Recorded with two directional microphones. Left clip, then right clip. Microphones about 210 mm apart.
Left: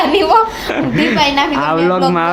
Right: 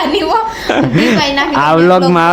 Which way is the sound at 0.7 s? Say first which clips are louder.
Right 4 dB; 35° right (ahead or behind).